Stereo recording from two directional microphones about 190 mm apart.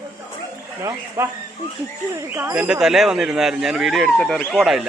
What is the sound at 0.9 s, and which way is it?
Speech, 15° right (ahead or behind).